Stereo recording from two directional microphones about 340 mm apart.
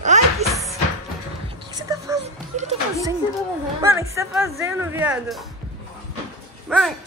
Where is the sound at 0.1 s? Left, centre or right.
Right.